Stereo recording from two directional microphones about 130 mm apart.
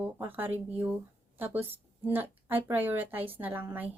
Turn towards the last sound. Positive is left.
turn(degrees=-15)  # may be behind; listen again after turning